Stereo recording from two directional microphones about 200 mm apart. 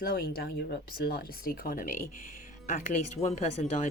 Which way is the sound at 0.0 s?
50° left (ahead or behind).